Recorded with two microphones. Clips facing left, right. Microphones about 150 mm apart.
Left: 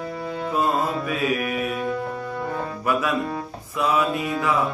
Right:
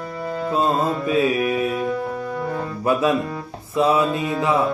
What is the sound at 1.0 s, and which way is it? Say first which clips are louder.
Music: right 5 dB; 25° right (ahead or behind).